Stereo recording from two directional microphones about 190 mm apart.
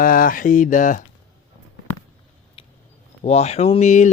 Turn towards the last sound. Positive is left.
turn(degrees=40)  # may be behind; listen again after turning